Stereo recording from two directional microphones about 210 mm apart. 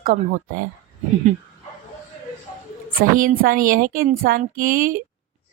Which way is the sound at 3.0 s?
45° right (ahead or behind).